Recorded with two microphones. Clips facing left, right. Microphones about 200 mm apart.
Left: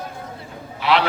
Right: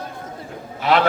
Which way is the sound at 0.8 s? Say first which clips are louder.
Right 1 dB; 45° right (ahead or behind).